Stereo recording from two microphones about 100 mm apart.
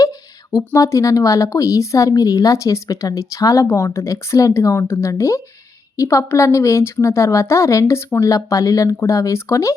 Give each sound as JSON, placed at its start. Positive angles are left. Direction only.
{"t": 0.5, "sound": "speech", "side_deg": 30}